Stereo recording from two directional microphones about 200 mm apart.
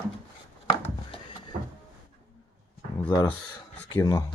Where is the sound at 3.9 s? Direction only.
15° left (ahead or behind).